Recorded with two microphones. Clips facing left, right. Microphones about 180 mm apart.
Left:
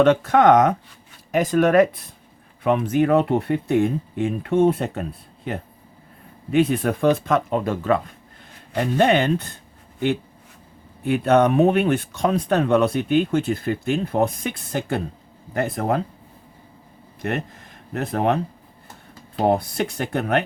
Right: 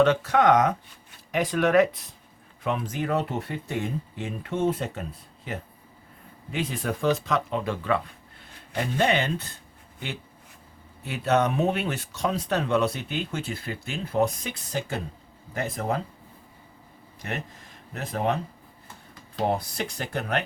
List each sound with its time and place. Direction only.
0.0 s speech: 55° left (ahead or behind)
6.5 s speech: 60° left (ahead or behind)
11.0 s speech: 55° left (ahead or behind)
17.2 s speech: 60° left (ahead or behind)
19.5 s speech: 55° left (ahead or behind)